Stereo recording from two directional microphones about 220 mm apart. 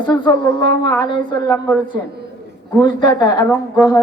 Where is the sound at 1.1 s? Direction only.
20° left (ahead or behind).